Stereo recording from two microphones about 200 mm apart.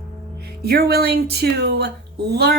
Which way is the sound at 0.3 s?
55° right (ahead or behind).